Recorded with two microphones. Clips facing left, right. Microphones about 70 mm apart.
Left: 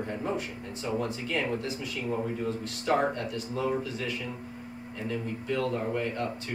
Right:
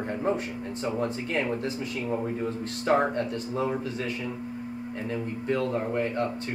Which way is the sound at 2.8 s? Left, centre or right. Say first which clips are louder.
Right 3 dB; right.